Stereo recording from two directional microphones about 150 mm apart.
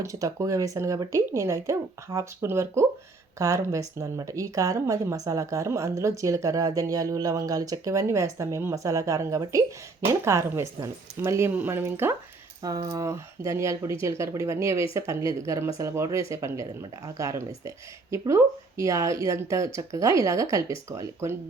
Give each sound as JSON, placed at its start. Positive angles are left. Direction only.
{"t": 0.0, "sound": "speech", "side_deg": -20}
{"t": 12.6, "sound": "speech", "side_deg": -25}